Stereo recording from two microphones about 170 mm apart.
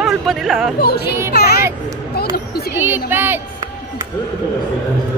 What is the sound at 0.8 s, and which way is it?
Speech, 70° left (ahead or behind).